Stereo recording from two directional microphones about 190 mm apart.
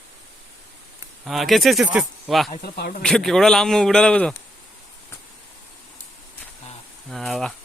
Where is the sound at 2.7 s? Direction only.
60° left (ahead or behind).